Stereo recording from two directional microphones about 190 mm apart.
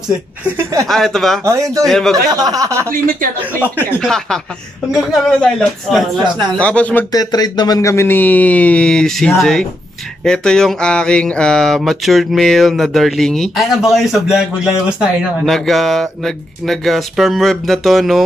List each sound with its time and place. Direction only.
0.8 s speech: centre (ahead or behind)
1.4 s speech: 15° right (ahead or behind)
1.9 s speech: 5° left (ahead or behind)
2.3 s speech: 20° right (ahead or behind)
4.0 s speech: 5° left (ahead or behind)
7.1 s speech: 20° left (ahead or behind); by 18.2 s centre (ahead or behind)